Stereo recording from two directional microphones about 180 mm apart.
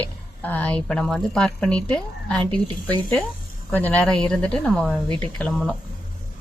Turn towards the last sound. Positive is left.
turn(degrees=5)  # may be behind; listen again after turning